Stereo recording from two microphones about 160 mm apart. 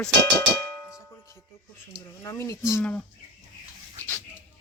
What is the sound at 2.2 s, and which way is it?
Speech, 20° left (ahead or behind).